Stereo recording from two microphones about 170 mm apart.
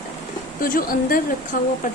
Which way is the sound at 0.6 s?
55° left (ahead or behind).